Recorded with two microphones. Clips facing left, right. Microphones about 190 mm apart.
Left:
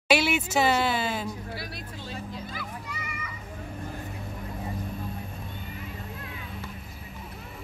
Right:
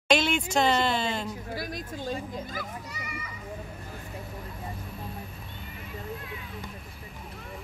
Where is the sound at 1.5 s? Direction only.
45° right (ahead or behind).